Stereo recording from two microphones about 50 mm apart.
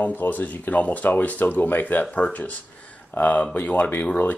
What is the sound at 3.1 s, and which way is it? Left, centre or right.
Speech, left.